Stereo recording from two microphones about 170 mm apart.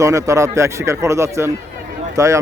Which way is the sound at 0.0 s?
20° right (ahead or behind).